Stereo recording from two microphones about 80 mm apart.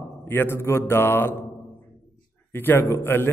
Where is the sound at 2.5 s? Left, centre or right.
Left.